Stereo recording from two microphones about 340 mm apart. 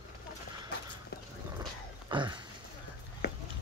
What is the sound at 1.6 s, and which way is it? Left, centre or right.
Dog, centre.